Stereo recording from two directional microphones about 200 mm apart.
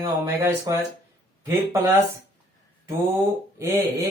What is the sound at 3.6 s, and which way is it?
Speech, 15° right (ahead or behind).